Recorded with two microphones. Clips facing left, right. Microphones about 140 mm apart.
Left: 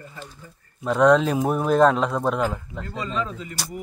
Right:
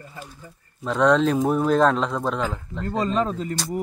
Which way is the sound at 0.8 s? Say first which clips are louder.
Left 1 dB; 5° left (ahead or behind).